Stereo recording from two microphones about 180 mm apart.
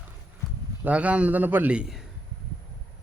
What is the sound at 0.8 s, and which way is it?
A man's voice, 5° right (ahead or behind).